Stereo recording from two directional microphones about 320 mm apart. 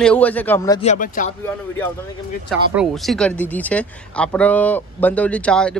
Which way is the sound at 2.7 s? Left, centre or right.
Centre.